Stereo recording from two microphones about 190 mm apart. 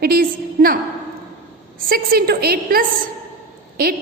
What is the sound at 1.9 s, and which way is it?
Speech, 55° right (ahead or behind).